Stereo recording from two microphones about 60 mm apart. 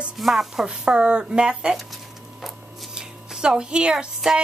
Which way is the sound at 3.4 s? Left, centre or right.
Centre.